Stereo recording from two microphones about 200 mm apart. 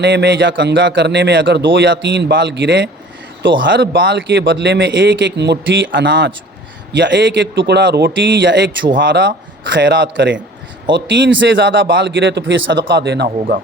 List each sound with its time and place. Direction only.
0.0 s a man's voice: 55° right (ahead or behind)
13.2 s speech: 40° right (ahead or behind)